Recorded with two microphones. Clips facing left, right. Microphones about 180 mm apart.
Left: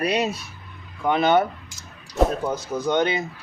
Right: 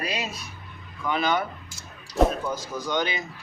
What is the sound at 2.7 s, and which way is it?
Speech, 30° left (ahead or behind).